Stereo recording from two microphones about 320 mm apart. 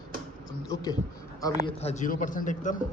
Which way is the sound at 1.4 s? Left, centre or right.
Centre.